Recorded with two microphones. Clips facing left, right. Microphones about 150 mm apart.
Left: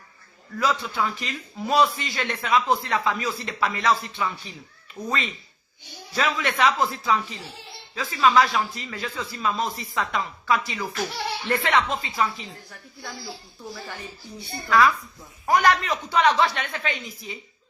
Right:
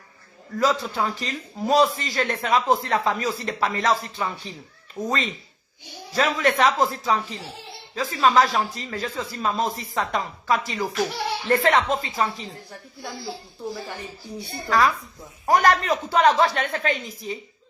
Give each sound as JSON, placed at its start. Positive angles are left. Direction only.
{"t": 0.6, "sound": "speech", "side_deg": -40}
{"t": 14.7, "sound": "speech", "side_deg": -40}